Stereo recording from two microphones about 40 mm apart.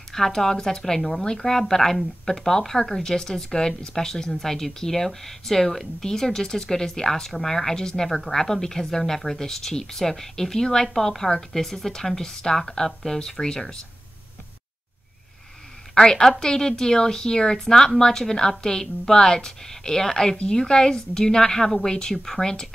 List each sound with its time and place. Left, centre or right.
0.1 s speech: centre
15.9 s a woman's voice: centre